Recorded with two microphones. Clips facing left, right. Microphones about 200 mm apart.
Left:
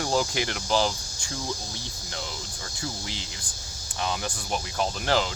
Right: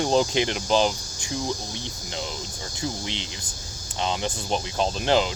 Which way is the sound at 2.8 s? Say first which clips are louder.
Right 5 dB; 20° right (ahead or behind).